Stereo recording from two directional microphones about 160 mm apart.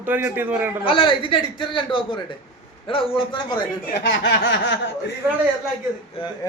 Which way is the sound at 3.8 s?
90° left.